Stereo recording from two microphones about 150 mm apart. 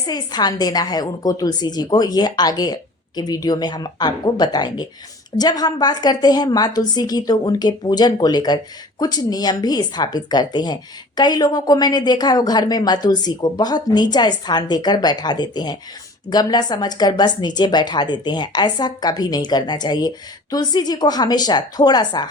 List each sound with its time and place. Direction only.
0.0 s speech: 25° left (ahead or behind)